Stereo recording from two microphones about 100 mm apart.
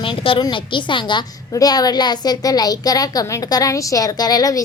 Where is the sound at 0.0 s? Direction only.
60° left (ahead or behind).